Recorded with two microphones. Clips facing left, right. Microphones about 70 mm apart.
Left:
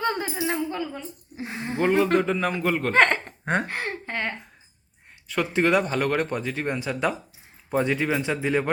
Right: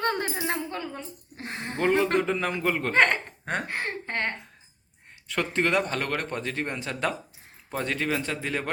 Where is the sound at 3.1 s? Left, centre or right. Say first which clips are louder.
Left 4 dB; left.